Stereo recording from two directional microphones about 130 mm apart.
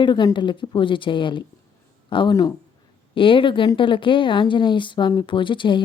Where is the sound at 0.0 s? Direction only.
35° left (ahead or behind).